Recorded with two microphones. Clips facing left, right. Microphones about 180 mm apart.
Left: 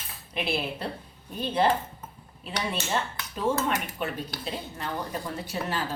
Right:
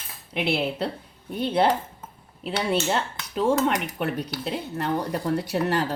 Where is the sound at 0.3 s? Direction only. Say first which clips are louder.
Right 5 dB; 70° right (ahead or behind).